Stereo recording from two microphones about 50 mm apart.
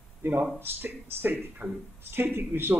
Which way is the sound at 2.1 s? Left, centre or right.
Right.